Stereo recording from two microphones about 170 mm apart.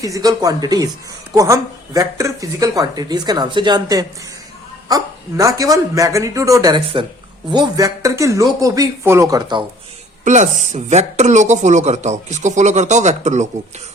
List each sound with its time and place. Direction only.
0.0 s speech: 20° right (ahead or behind)
10.2 s speech: 45° right (ahead or behind)